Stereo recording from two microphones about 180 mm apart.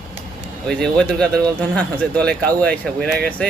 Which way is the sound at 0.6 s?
5° left (ahead or behind).